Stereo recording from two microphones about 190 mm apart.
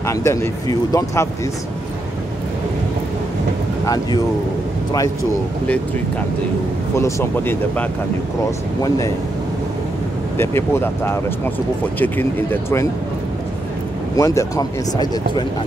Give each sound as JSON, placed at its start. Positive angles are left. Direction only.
{"t": 0.0, "sound": "speech", "side_deg": 15}
{"t": 3.8, "sound": "speech", "side_deg": 20}
{"t": 7.0, "sound": "speech", "side_deg": 15}
{"t": 10.3, "sound": "speech", "side_deg": 15}
{"t": 14.1, "sound": "speech", "side_deg": 15}